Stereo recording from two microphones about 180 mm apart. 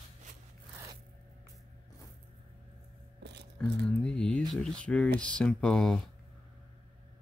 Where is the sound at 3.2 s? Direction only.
70° right (ahead or behind).